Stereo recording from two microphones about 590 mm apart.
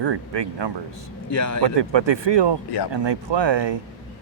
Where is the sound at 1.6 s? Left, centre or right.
Right.